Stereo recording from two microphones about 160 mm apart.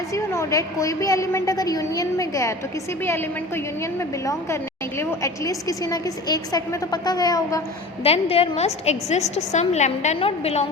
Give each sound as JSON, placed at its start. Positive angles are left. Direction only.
{"t": 0.1, "sound": "a woman's voice", "side_deg": 20}
{"t": 4.9, "sound": "a woman's voice", "side_deg": 20}
{"t": 8.0, "sound": "a woman's voice", "side_deg": 40}